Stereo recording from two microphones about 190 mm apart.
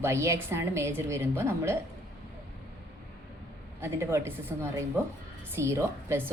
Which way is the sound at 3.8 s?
15° right (ahead or behind).